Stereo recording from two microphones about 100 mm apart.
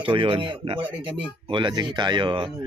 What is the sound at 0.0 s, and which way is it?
Speech, 60° right (ahead or behind).